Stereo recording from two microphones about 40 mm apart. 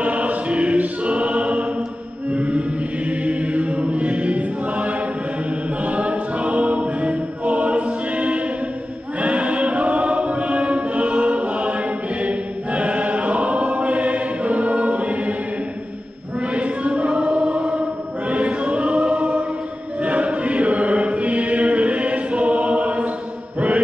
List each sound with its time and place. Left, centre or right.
0.0 s choir: right
2.3 s chant: right
3.1 s choir: right
9.2 s music: right
12.2 s choir: right
16.3 s choir: right
20.0 s chant: right